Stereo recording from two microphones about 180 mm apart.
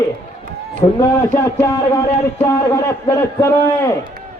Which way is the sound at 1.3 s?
15° left (ahead or behind).